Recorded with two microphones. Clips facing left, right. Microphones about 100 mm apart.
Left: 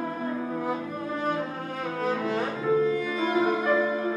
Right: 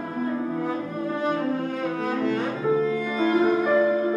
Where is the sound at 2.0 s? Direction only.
5° left (ahead or behind).